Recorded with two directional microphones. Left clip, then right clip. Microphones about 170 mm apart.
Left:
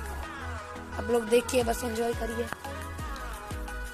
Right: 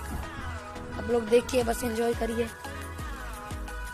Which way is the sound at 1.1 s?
10° right (ahead or behind).